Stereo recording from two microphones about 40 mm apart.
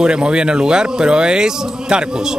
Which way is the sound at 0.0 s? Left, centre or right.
Right.